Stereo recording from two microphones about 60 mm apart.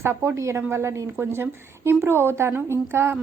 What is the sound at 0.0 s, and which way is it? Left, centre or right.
A woman's voice, right.